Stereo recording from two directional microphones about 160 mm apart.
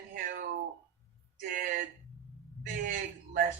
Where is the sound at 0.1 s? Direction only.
65° right (ahead or behind).